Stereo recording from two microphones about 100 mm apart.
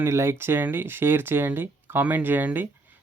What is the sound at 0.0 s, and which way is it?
Speech, 25° right (ahead or behind).